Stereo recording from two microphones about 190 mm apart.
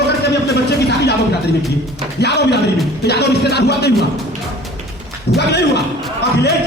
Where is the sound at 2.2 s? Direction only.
60° left (ahead or behind).